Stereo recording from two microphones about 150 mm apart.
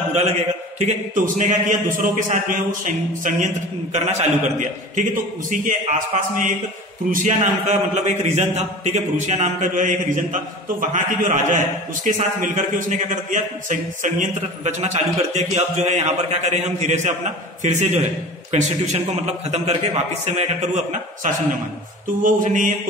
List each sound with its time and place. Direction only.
0.7 s a man's voice: 55° right (ahead or behind)
22.2 s a man's voice: 60° right (ahead or behind)